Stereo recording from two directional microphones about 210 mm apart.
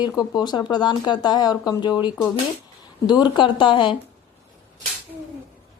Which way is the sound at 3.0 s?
20° left (ahead or behind).